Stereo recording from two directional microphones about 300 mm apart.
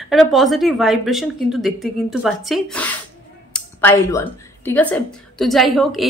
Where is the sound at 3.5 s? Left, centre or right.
Centre.